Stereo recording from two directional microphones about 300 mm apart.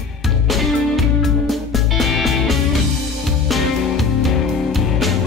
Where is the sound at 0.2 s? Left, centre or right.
Centre.